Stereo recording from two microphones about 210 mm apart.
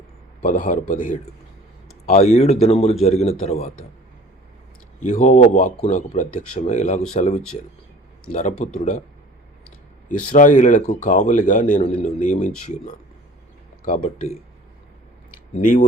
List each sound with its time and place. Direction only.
0.4 s speech: 40° left (ahead or behind)
5.0 s speech: 35° left (ahead or behind)
10.1 s speech: 40° left (ahead or behind)
13.8 s speech: 40° left (ahead or behind)
15.5 s speech: 40° left (ahead or behind)